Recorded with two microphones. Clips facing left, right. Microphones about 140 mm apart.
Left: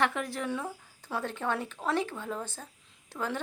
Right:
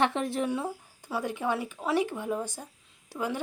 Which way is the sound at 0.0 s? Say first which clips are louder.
Right 3 dB; 20° right (ahead or behind).